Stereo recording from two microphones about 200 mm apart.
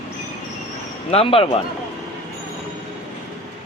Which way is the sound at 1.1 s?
30° left (ahead or behind).